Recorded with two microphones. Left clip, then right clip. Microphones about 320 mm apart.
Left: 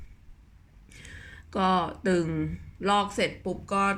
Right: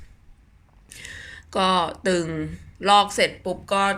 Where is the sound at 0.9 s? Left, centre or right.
Centre.